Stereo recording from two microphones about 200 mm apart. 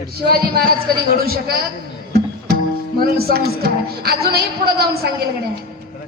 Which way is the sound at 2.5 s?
50° right (ahead or behind).